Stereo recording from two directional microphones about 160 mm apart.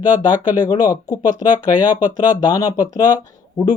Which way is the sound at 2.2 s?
25° left (ahead or behind).